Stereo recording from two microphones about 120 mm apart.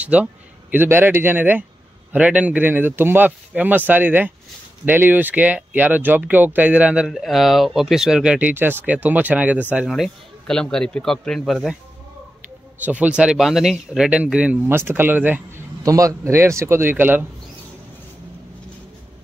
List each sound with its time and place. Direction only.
0.0 s speech: 10° right (ahead or behind)
7.1 s speech: centre (ahead or behind)
9.8 s speech: centre (ahead or behind)
12.8 s speech: 10° right (ahead or behind)
15.8 s a man's voice: 30° right (ahead or behind)